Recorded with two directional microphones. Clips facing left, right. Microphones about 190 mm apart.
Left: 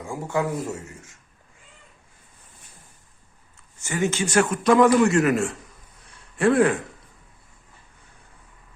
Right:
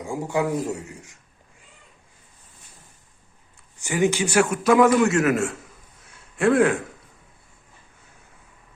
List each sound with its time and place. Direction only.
0.0 s a man's voice: 15° right (ahead or behind)
3.8 s a man's voice: 15° right (ahead or behind)